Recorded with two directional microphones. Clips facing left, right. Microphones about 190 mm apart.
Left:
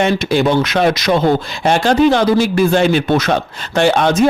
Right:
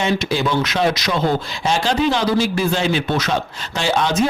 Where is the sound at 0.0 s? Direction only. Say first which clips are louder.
Left 5 dB; 55° left (ahead or behind).